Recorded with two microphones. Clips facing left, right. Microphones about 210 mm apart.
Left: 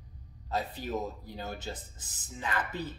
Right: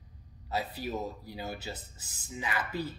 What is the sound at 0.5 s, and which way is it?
Speech, 10° right (ahead or behind).